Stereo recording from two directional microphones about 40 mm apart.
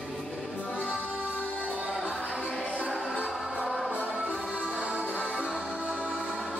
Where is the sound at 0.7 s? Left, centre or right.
Right.